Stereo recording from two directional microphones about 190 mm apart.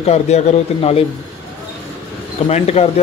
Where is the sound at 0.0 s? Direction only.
35° left (ahead or behind).